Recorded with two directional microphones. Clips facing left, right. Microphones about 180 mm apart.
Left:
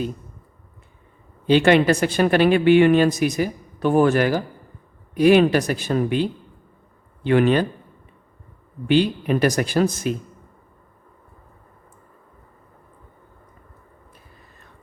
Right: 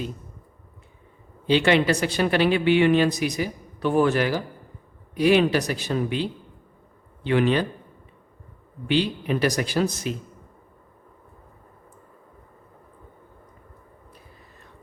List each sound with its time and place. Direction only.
1.5 s a woman's voice: 50° left (ahead or behind)
7.3 s a woman's voice: 50° left (ahead or behind)
8.9 s a woman's voice: 50° left (ahead or behind)